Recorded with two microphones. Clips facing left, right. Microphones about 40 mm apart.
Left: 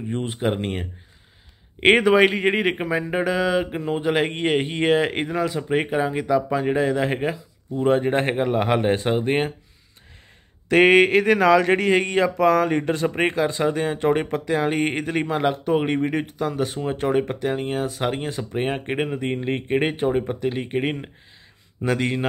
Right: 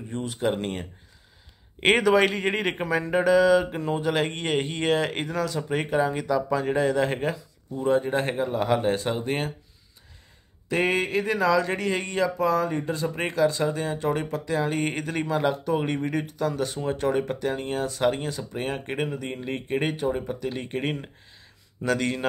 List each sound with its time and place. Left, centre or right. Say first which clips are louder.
0.1 s speech: left 3 dB; left
0.5 s speech: left 1 dB; left
7.8 s speech: left 4 dB; left
10.7 s speech: left 9 dB; left
12.4 s speech: left 6 dB; left; by 18.3 s centre
18.3 s speech: left 5 dB; left
20.5 s speech: left 4 dB; left